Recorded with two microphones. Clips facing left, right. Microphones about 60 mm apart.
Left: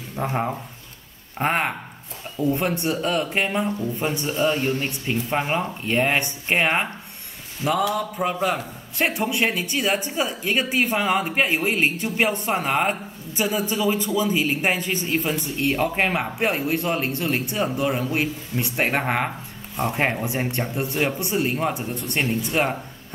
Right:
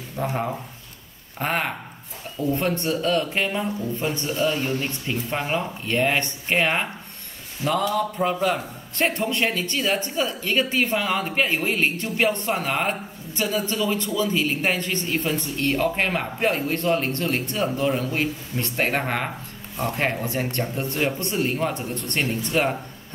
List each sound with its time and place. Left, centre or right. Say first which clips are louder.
0.1 s a man's voice: left 1 dB; centre
7.9 s a man's voice: right 1 dB; centre